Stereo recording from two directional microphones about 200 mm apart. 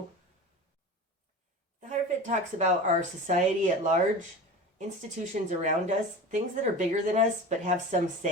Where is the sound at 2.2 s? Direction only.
35° right (ahead or behind).